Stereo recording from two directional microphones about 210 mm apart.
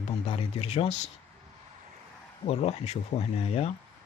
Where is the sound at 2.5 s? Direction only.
30° left (ahead or behind).